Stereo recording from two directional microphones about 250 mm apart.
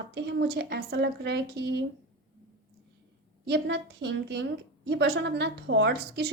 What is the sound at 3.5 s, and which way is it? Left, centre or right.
A woman's voice, right.